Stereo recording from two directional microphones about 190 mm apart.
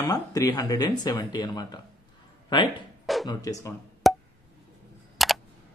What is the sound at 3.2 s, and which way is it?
Speech, 20° left (ahead or behind).